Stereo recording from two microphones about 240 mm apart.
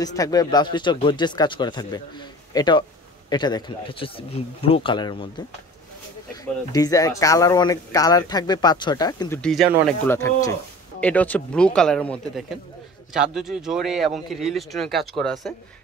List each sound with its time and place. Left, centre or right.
0.0 s speech: centre
6.7 s speech: centre
9.4 s speech: centre
10.0 s speech: centre